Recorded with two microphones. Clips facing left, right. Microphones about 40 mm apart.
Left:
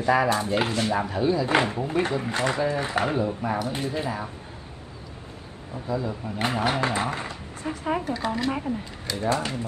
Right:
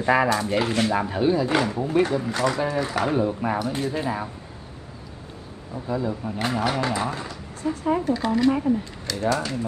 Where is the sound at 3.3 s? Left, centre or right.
Centre.